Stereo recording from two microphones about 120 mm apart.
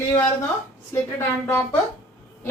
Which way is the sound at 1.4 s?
20° left (ahead or behind).